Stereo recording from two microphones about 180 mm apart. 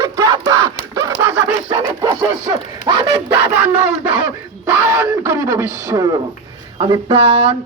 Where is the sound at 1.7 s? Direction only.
20° right (ahead or behind).